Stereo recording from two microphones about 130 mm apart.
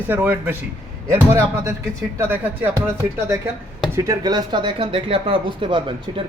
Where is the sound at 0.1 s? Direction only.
15° right (ahead or behind).